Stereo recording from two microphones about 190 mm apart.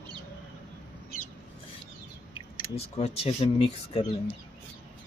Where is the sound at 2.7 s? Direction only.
35° left (ahead or behind).